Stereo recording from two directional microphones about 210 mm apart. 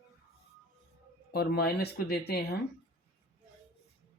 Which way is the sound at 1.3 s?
50° left (ahead or behind).